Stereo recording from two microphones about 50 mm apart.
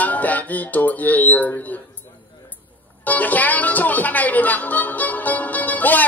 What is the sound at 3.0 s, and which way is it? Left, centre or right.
Speech, left.